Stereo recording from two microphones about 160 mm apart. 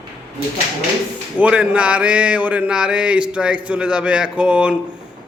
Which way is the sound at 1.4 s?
5° right (ahead or behind).